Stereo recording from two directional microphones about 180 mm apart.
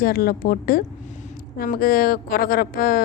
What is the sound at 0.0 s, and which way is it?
A woman's voice, 55° left (ahead or behind).